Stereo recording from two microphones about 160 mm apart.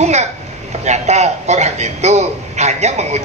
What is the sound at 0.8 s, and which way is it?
A woman's voice, 45° right (ahead or behind).